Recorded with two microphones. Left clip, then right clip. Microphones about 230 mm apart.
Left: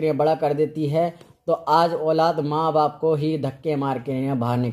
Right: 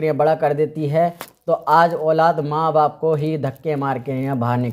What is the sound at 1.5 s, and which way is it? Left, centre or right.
A man's voice, left.